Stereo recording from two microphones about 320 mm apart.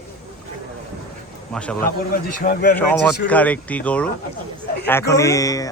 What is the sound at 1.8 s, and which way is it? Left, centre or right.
Speech, left.